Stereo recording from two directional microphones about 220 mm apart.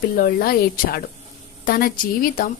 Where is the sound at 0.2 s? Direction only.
40° left (ahead or behind).